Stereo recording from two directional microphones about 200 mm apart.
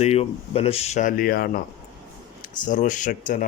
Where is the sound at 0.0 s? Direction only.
30° left (ahead or behind).